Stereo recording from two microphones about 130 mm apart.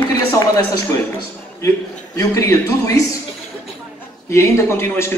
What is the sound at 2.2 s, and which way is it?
Speech, 25° left (ahead or behind).